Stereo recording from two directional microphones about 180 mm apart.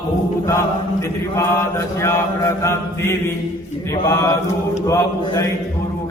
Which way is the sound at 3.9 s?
20° left (ahead or behind).